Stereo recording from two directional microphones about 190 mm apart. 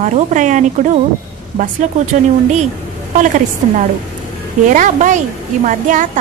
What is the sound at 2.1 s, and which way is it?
A woman's voice, 40° right (ahead or behind).